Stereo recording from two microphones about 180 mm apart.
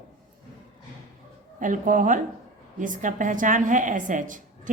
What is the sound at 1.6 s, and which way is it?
A woman's voice, 45° right (ahead or behind).